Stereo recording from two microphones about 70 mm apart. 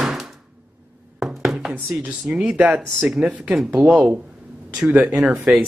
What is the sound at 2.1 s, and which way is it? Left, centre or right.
Speech, centre.